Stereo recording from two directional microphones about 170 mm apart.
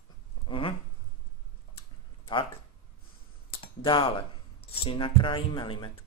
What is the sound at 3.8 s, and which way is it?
Speech, 30° left (ahead or behind).